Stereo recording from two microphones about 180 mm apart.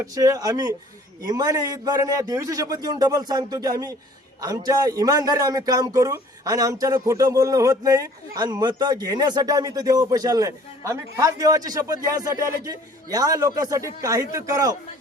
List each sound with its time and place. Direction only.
0.0 s a man's voice: 20° right (ahead or behind)